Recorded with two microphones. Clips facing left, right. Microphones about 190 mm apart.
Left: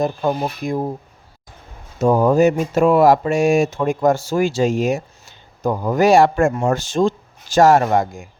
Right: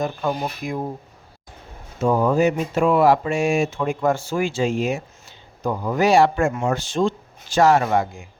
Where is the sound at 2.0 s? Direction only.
40° left (ahead or behind).